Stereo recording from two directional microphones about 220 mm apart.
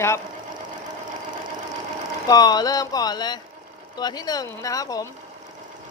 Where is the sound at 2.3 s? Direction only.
20° left (ahead or behind).